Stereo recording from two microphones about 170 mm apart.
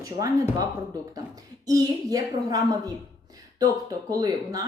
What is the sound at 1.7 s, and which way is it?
Speech, 20° right (ahead or behind).